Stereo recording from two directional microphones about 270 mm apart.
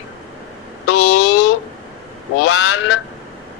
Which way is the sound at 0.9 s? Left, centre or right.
Left.